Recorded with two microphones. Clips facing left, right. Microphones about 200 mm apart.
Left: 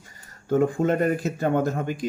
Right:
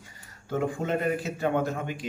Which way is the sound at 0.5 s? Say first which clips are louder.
Left 7 dB; 50° left (ahead or behind).